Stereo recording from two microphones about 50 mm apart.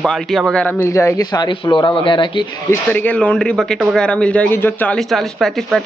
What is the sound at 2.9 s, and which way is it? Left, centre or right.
Speech, left.